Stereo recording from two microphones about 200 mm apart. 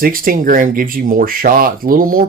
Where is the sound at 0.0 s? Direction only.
45° right (ahead or behind).